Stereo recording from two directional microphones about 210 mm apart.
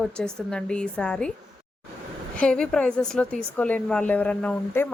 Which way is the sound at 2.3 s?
5° left (ahead or behind).